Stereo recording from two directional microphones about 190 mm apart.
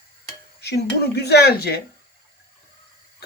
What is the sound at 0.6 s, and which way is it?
Speech, 60° left (ahead or behind).